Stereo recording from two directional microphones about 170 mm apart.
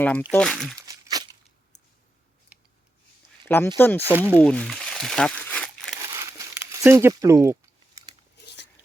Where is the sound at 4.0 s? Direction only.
10° right (ahead or behind).